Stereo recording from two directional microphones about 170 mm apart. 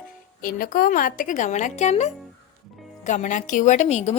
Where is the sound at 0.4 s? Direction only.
55° left (ahead or behind).